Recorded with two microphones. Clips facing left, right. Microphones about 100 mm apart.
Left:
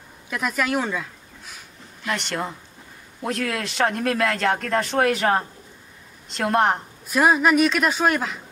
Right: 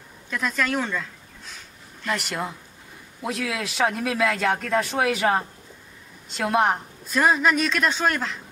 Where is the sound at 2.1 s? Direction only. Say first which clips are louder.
Left 1 dB; 5° right (ahead or behind).